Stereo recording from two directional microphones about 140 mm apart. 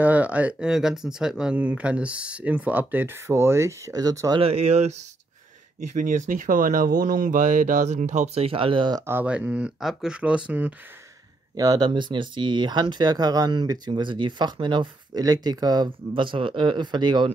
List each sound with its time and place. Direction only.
0.0 s speech: 10° right (ahead or behind); by 4.4 s 25° right (ahead or behind)
4.4 s speech: 45° right (ahead or behind)
5.8 s speech: 70° right (ahead or behind)
8.5 s speech: 40° right (ahead or behind)
9.0 s speech: 15° right (ahead or behind)
11.5 s speech: 25° right (ahead or behind)